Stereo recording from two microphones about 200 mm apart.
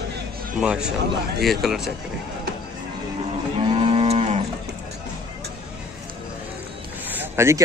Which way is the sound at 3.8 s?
30° right (ahead or behind).